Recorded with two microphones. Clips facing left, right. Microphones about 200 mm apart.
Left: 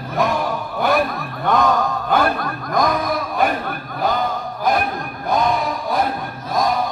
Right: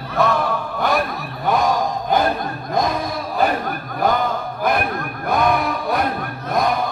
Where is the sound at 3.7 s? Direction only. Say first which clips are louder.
Right 2 dB; 50° right (ahead or behind).